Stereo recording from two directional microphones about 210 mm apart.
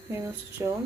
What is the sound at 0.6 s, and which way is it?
Speech, 15° right (ahead or behind).